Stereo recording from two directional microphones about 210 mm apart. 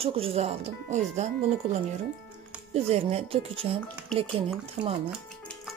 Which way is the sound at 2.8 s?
30° right (ahead or behind).